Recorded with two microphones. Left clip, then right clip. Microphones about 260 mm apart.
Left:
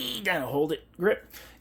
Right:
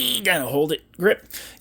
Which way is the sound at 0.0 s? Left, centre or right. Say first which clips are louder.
Right 8 dB; right.